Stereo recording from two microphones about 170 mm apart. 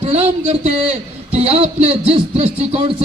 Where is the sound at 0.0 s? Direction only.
40° right (ahead or behind).